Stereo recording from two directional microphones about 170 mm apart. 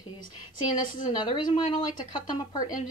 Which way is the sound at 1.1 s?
25° left (ahead or behind).